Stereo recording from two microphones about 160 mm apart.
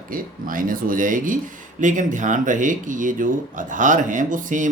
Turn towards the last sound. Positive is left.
turn(degrees=-55)  # may be behind; listen again after turning